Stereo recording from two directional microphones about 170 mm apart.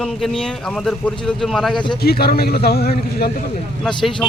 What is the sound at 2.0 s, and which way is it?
A man's voice, 65° left (ahead or behind).